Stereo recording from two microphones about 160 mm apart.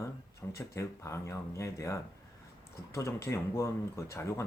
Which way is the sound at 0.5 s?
20° left (ahead or behind).